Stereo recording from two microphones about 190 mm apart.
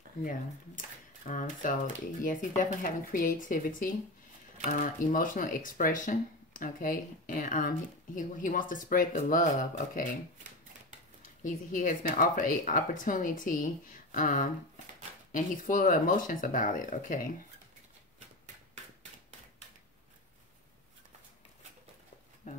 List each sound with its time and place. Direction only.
0.2 s speech: 45° left (ahead or behind)
11.2 s speech: 45° left (ahead or behind)
22.4 s a sound: 45° left (ahead or behind)